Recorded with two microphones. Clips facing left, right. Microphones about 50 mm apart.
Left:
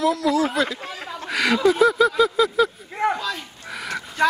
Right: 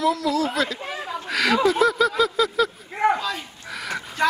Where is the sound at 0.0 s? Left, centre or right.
Centre.